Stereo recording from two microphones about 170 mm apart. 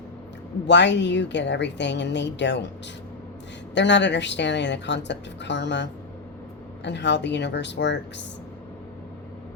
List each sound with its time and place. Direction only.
0.7 s a woman's voice: 90° left
3.8 s a woman's voice: 90° left